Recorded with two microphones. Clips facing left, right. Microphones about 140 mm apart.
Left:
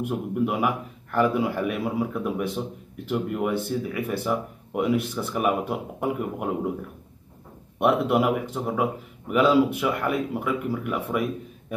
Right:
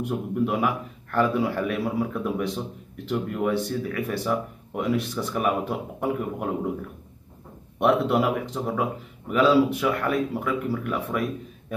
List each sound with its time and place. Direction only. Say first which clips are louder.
0.0 s a man's voice: even; 10° left (ahead or behind)
7.8 s a man's voice: even; 10° left (ahead or behind)